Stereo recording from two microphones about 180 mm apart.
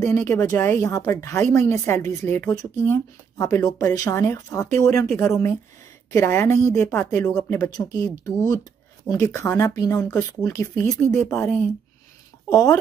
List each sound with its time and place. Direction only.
0.0 s a woman's voice: 15° left (ahead or behind)
9.1 s a woman's voice: 15° left (ahead or behind)
10.9 s a woman's voice: 5° left (ahead or behind)
12.4 s speech: 20° left (ahead or behind)